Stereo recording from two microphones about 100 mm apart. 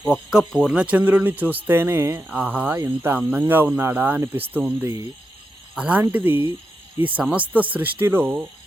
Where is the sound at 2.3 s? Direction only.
15° right (ahead or behind).